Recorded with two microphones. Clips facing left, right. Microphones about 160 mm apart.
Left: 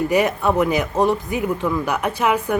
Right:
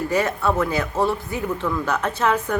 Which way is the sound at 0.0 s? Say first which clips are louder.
Left 3 dB; 15° left (ahead or behind).